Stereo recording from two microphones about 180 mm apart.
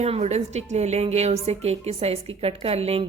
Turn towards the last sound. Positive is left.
turn(degrees=-35)  # may be behind; listen again after turning